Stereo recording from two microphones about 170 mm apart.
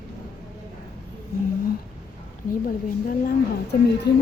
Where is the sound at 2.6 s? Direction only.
55° left (ahead or behind); by 4.1 s 80° left.